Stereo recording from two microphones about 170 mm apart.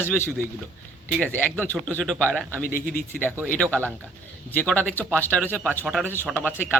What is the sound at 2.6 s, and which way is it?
Speech, 55° left (ahead or behind).